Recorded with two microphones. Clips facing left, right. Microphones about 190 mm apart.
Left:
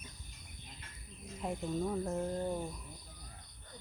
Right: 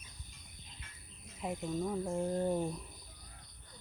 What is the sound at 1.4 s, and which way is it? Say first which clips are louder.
Speech: even; centre (ahead or behind).